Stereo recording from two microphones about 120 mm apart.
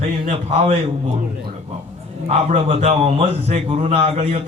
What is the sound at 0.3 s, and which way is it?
Speech, 65° right (ahead or behind).